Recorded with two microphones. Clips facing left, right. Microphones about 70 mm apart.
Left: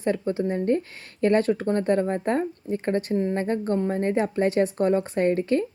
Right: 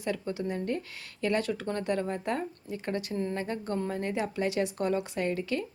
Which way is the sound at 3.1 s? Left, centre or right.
Left.